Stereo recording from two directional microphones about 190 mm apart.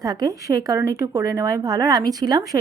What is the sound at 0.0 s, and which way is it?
Speech, 20° right (ahead or behind).